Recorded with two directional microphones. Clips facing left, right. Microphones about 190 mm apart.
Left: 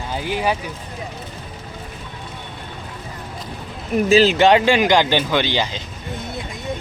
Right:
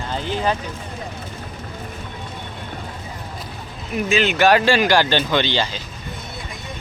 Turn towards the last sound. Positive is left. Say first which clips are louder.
# even
turn(degrees=15)  # may be behind; listen again after turning